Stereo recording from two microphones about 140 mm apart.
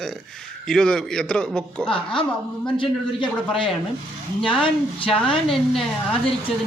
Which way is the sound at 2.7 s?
40° left (ahead or behind).